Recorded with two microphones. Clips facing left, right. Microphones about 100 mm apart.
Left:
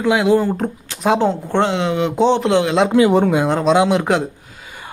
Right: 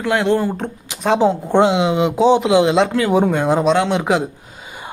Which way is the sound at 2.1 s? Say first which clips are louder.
Right 1 dB; 5° right (ahead or behind).